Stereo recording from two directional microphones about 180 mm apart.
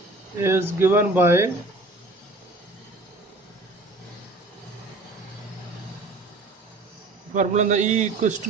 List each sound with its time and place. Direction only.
0.3 s speech: 15° right (ahead or behind)
7.3 s a man's voice: 40° right (ahead or behind)